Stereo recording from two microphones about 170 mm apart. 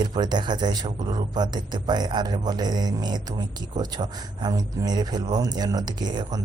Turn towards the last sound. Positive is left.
turn(degrees=-25)  # may be behind; listen again after turning